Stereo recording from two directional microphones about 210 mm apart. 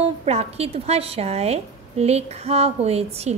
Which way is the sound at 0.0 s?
30° right (ahead or behind).